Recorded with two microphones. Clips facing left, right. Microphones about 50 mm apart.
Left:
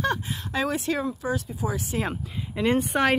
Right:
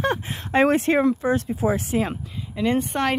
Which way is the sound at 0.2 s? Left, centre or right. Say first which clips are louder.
Right 8 dB; right.